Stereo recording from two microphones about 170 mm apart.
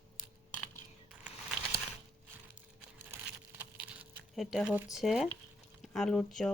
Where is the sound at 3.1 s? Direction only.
10° right (ahead or behind).